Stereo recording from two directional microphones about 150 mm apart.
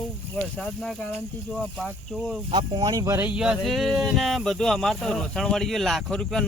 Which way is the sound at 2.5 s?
30° right (ahead or behind).